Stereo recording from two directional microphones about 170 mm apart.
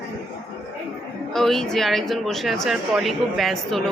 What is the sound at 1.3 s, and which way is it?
A woman's voice, centre (ahead or behind).